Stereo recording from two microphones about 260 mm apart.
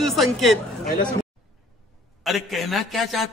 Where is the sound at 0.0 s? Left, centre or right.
Centre.